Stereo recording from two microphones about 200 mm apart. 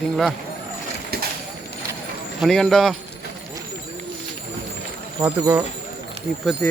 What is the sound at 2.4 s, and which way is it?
Speech, centre (ahead or behind).